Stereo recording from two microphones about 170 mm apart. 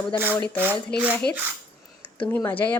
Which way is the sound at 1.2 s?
70° left (ahead or behind).